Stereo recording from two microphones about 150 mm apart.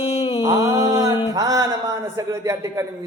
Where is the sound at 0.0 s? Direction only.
45° left (ahead or behind).